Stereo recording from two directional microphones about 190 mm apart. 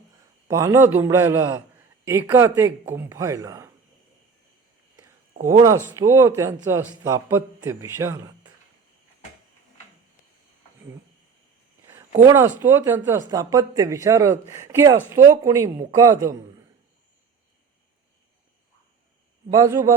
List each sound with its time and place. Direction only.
0.4 s speech: 15° right (ahead or behind)
5.8 s speech: 15° right (ahead or behind)
12.2 s speech: 15° right (ahead or behind)
19.5 s speech: 15° right (ahead or behind)